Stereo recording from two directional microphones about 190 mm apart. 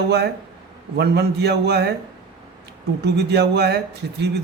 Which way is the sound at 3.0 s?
60° right (ahead or behind).